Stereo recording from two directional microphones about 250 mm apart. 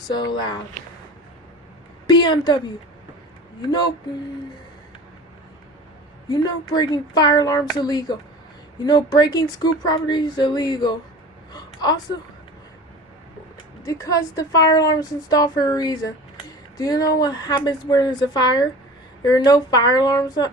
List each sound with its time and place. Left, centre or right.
0.1 s a woman's voice: centre
2.0 s a woman's voice: centre
3.7 s a woman's voice: centre
6.2 s a woman's voice: centre
11.5 s gasp: centre
13.8 s a woman's voice: centre